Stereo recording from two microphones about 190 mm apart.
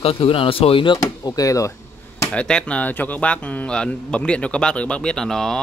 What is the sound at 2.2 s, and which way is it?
Speech, 5° left (ahead or behind).